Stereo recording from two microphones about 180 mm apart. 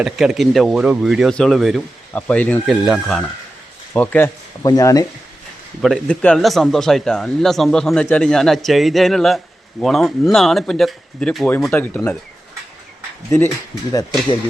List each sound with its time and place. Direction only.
0.0 s speech: centre (ahead or behind)
4.6 s speech: 20° left (ahead or behind)
5.8 s speech: 5° left (ahead or behind)
13.9 s speech: 25° left (ahead or behind)